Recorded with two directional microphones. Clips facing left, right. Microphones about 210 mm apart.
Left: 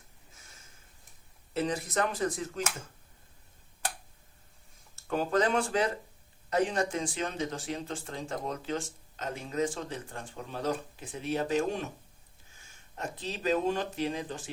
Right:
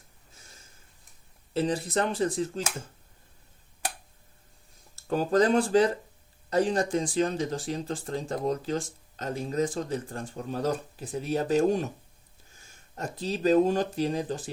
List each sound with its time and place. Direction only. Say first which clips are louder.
1.5 s speech: right 3 dB; 30° right (ahead or behind)
4.9 s speech: right 5 dB; 35° right (ahead or behind)
13.0 s speech: right 7 dB; 40° right (ahead or behind)